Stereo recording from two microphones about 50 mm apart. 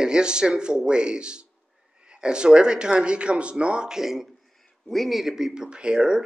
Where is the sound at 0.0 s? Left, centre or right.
Centre.